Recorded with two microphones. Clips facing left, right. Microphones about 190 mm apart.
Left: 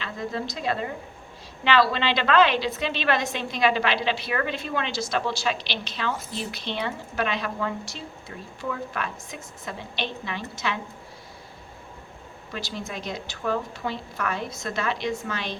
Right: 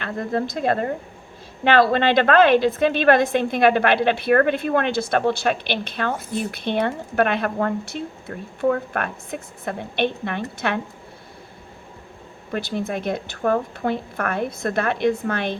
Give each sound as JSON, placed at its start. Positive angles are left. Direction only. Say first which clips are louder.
{"t": 0.0, "sound": "a woman's voice", "louder": "right 6 dB", "side_deg": -55}
{"t": 12.5, "sound": "a woman's voice", "louder": "right 9 dB", "side_deg": -55}